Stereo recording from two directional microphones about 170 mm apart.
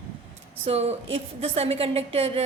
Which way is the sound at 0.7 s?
35° right (ahead or behind).